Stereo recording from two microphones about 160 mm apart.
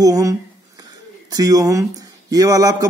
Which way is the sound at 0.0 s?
20° right (ahead or behind).